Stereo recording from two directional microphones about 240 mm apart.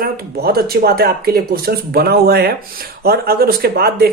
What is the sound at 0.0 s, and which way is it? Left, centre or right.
Speech, right.